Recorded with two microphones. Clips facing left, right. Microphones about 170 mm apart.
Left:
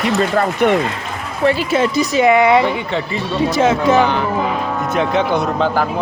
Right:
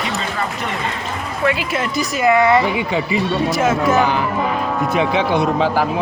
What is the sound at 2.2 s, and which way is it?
Speech, 20° left (ahead or behind).